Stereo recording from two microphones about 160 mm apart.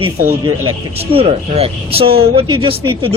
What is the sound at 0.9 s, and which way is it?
A man's voice, 40° right (ahead or behind).